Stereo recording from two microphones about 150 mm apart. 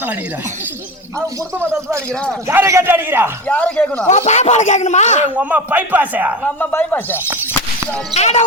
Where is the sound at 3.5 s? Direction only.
10° left (ahead or behind).